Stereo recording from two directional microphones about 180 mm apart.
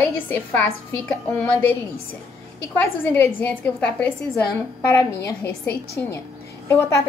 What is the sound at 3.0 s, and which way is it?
A woman's voice, 10° left (ahead or behind).